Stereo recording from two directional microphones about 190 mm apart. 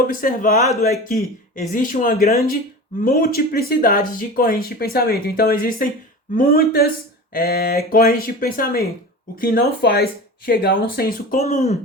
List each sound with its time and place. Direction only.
0.1 s speech: 45° left (ahead or behind)
11.3 s speech: 35° left (ahead or behind)